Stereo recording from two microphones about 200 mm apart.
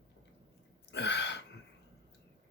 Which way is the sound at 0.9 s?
60° left (ahead or behind).